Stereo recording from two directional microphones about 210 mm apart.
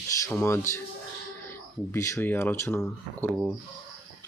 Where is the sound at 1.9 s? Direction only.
15° left (ahead or behind).